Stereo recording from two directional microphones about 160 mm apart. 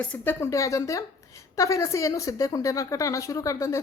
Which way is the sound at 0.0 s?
10° left (ahead or behind).